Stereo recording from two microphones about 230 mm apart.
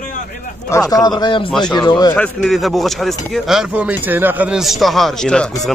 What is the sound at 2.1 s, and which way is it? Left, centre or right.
Speech, centre.